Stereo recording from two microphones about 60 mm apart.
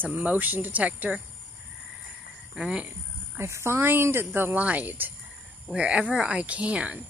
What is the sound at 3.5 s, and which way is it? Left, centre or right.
Speech, right.